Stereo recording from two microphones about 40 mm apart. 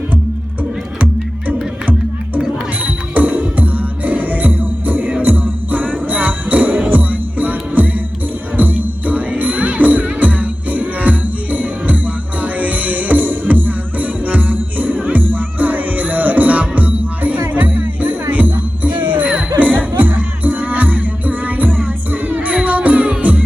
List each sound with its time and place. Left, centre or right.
2.8 s music: right
5.2 s jingle bell: right
8.5 s music: right